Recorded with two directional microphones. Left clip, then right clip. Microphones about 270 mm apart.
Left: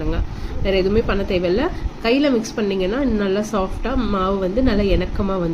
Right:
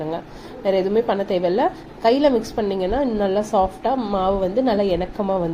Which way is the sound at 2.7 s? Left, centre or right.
Right.